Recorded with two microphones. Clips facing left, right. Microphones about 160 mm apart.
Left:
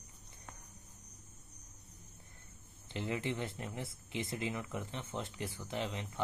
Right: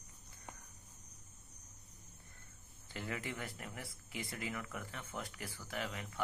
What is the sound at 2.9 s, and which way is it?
Speech, 20° left (ahead or behind).